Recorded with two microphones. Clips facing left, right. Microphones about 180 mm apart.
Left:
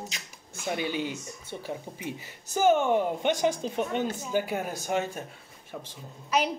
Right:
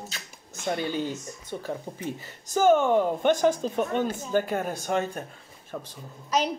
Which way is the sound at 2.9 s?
45° right (ahead or behind).